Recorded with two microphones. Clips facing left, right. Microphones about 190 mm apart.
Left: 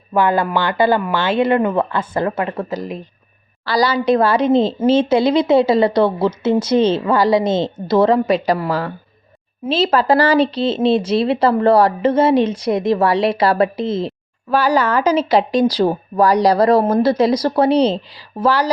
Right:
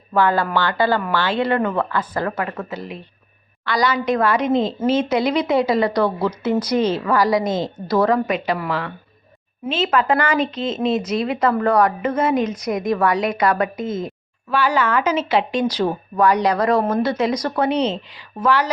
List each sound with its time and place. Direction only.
0.1 s a woman's voice: 20° left (ahead or behind)
2.6 s a woman's voice: 40° left (ahead or behind); by 8.4 s 25° left (ahead or behind)
8.4 s speech: 35° left (ahead or behind)